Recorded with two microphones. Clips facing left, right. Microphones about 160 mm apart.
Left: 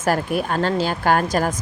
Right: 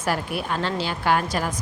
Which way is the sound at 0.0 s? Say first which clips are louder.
Left 5 dB; 45° left (ahead or behind).